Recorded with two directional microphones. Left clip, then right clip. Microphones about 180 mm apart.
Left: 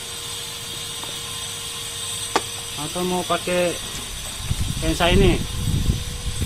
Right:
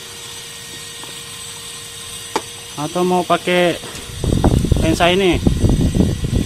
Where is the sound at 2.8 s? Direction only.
55° right (ahead or behind).